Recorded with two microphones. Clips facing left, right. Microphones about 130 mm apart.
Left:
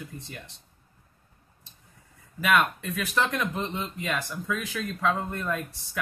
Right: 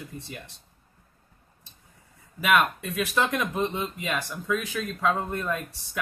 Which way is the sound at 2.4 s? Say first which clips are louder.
Right 1 dB; 5° right (ahead or behind).